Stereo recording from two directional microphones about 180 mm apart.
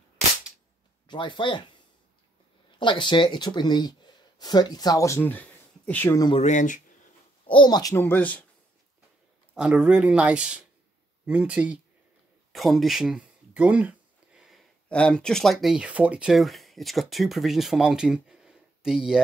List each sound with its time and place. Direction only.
1.0 s speech: 25° left (ahead or behind)
2.8 s speech: 25° left (ahead or behind); by 6.2 s 10° left (ahead or behind)
6.4 s speech: 45° left (ahead or behind)
7.4 s speech: 25° left (ahead or behind); by 8.5 s 10° left (ahead or behind)
9.6 s speech: 5° right (ahead or behind)